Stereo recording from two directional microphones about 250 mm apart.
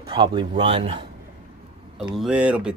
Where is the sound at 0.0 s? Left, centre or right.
Centre.